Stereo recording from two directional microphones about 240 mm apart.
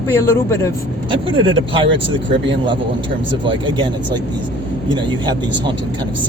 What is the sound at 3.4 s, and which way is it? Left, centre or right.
Speech, centre.